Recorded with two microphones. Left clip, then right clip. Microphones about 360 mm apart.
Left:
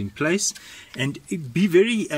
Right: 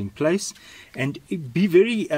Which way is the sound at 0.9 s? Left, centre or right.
Centre.